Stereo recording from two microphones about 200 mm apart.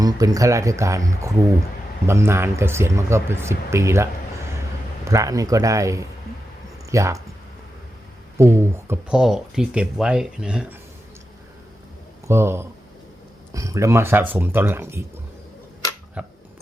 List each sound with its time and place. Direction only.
0.0 s speech: 15° right (ahead or behind)
8.4 s speech: 15° right (ahead or behind)
12.3 s speech: 10° right (ahead or behind)
16.2 s a sound: 5° right (ahead or behind)